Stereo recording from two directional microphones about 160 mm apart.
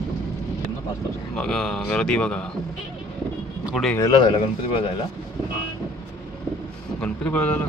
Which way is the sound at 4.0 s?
25° left (ahead or behind).